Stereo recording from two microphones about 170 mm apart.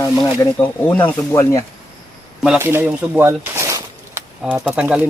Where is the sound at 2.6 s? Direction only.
15° right (ahead or behind).